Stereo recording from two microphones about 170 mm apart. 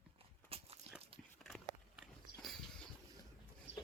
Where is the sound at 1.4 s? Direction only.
Centre (ahead or behind).